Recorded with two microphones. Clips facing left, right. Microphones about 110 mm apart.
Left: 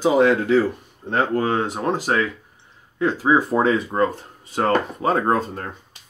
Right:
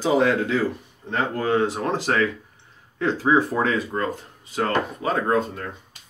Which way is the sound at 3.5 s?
25° left (ahead or behind).